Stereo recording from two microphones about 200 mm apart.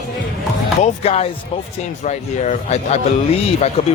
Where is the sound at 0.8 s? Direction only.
30° left (ahead or behind).